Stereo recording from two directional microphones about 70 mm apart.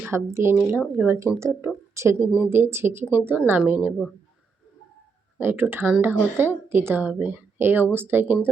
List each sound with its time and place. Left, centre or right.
0.1 s speech: right
2.1 s speech: right
5.4 s speech: right